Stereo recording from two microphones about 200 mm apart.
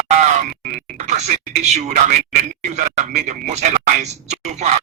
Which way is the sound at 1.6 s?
35° right (ahead or behind).